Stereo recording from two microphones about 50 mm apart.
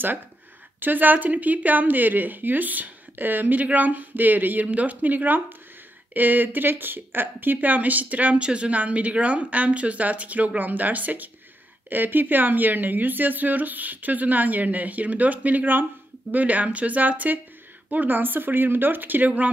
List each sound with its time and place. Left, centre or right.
0.7 s speech: right